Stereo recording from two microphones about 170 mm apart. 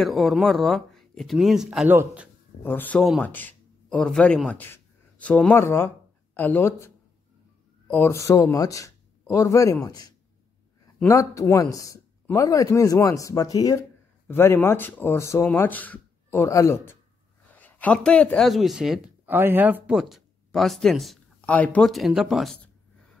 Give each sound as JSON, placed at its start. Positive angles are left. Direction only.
{"t": 0.0, "sound": "speech", "side_deg": 0}
{"t": 2.6, "sound": "speech", "side_deg": 10}
{"t": 7.9, "sound": "speech", "side_deg": 15}